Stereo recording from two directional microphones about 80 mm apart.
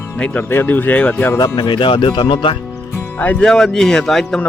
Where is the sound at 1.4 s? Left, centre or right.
Left.